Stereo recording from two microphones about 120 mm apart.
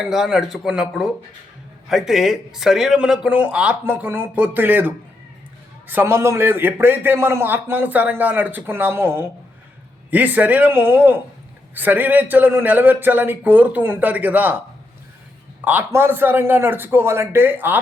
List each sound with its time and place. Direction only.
0.0 s a man's voice: 5° right (ahead or behind)
15.6 s a man's voice: 15° right (ahead or behind)